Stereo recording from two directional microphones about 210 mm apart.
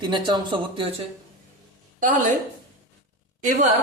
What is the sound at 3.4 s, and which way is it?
Speech, 35° right (ahead or behind).